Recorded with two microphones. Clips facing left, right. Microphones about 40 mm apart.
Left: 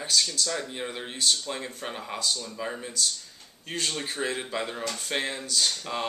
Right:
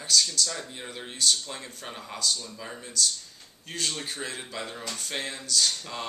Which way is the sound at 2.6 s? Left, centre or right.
Centre.